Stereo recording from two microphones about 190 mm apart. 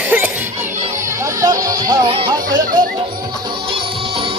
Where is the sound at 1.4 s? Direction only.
20° right (ahead or behind).